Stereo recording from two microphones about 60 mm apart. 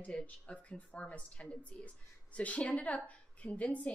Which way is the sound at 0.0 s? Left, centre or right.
Left.